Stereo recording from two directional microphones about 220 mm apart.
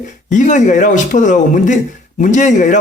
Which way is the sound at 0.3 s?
35° left (ahead or behind).